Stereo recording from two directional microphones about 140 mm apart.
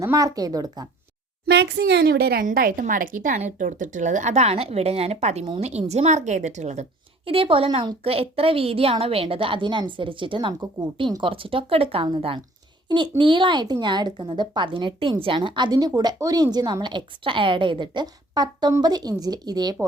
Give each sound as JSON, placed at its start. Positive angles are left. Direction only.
{"t": 0.0, "sound": "speech", "side_deg": -25}
{"t": 2.4, "sound": "a woman's voice", "side_deg": -85}
{"t": 7.3, "sound": "speech", "side_deg": -40}